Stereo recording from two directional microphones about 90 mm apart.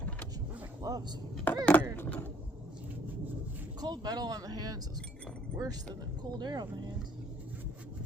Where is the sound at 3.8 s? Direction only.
50° right (ahead or behind).